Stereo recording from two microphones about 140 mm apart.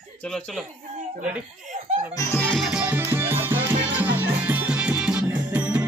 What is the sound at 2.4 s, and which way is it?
Music, 5° left (ahead or behind).